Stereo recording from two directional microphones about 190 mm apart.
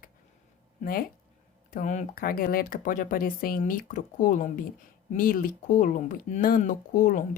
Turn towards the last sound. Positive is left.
turn(degrees=45)  # may be behind; listen again after turning